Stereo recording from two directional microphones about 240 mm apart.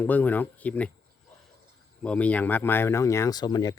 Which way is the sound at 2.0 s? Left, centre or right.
Centre.